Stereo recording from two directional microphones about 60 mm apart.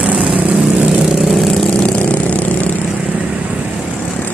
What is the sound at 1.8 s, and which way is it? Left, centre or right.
Vehicle, left.